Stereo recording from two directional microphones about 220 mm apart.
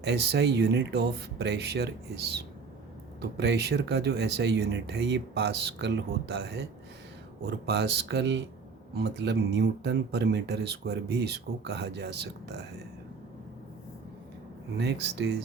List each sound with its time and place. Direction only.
0.0 s speech: 50° right (ahead or behind)
14.8 s speech: 50° right (ahead or behind)